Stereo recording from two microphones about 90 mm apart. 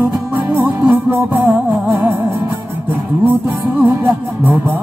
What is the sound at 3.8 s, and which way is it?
Music, 20° right (ahead or behind).